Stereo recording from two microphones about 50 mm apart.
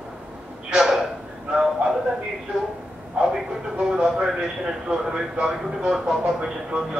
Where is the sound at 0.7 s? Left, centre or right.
Centre.